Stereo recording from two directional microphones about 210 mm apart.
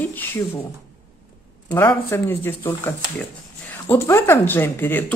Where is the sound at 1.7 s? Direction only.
10° left (ahead or behind).